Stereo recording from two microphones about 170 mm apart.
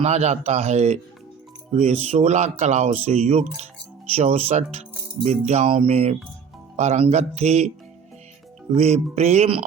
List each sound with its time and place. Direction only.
0.0 s speech: 40° right (ahead or behind)
8.7 s speech: 40° right (ahead or behind)